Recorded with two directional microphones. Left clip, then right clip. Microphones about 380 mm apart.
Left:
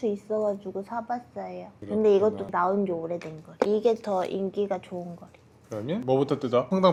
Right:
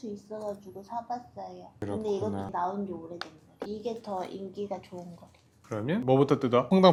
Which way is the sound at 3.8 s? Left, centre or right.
Left.